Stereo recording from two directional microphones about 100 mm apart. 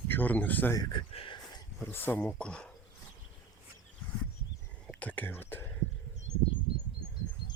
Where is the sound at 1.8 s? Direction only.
20° left (ahead or behind).